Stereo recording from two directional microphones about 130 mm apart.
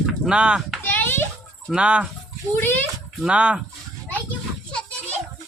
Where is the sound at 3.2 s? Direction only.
10° right (ahead or behind).